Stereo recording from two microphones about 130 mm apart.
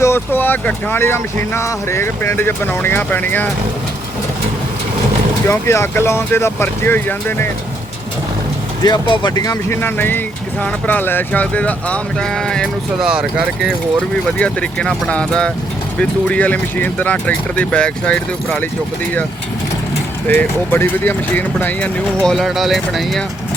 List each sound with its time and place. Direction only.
0.0 s speech: 15° left (ahead or behind)
5.5 s speech: 20° left (ahead or behind)
8.8 s speech: 35° left (ahead or behind); by 13.7 s 5° right (ahead or behind)
14.3 s speech: 10° left (ahead or behind)
20.2 s speech: 10° left (ahead or behind)